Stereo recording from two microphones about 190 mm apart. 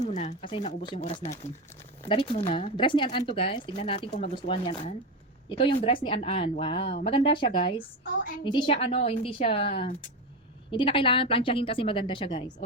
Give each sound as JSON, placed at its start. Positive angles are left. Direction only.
{"t": 0.0, "sound": "speech", "side_deg": 35}